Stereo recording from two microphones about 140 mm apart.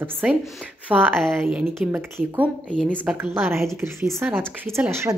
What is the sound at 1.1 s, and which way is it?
Speech, 5° left (ahead or behind).